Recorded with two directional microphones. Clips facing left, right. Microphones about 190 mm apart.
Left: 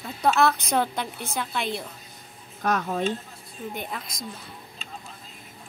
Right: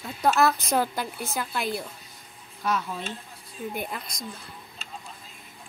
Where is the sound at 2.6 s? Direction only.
50° left (ahead or behind).